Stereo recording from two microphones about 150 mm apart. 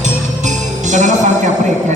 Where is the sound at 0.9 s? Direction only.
55° right (ahead or behind).